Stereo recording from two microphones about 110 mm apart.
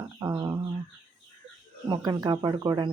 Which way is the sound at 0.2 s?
35° right (ahead or behind).